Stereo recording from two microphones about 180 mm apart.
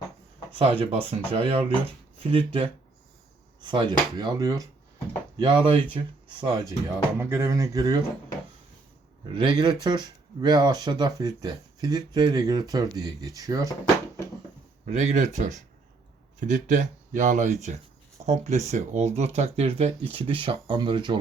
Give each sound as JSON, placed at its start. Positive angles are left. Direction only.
{"t": 0.6, "sound": "speech", "side_deg": -30}
{"t": 9.3, "sound": "speech", "side_deg": -30}
{"t": 14.8, "sound": "speech", "side_deg": -35}